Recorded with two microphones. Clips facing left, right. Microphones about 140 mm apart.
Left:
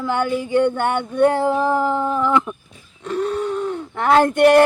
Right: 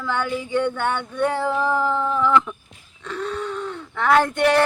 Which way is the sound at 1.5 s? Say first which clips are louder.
Left 3 dB; 15° left (ahead or behind).